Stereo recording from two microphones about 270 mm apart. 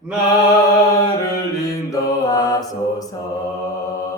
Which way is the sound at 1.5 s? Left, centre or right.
Centre.